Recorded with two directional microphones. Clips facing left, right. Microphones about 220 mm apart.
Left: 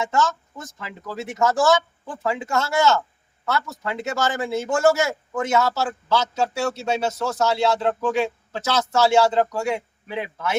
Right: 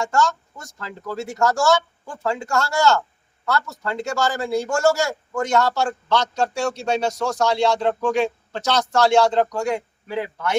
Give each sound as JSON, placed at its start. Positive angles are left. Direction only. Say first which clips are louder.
{"t": 0.0, "sound": "a man's voice", "louder": "right 1 dB", "side_deg": 20}
{"t": 3.9, "sound": "a man's voice", "louder": "right 1 dB", "side_deg": 20}
{"t": 5.3, "sound": "a man's voice", "louder": "right 2 dB", "side_deg": 5}
{"t": 10.1, "sound": "a man's voice", "louder": "right 3 dB", "side_deg": 20}